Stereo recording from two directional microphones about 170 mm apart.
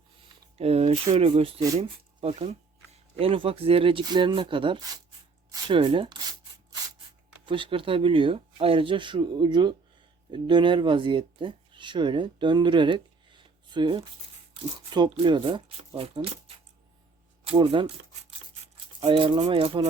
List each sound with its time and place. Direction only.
0.5 s speech: 35° right (ahead or behind)
7.4 s speech: 30° right (ahead or behind)
17.4 s speech: 35° right (ahead or behind)